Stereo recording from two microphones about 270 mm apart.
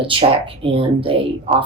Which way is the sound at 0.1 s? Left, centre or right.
Centre.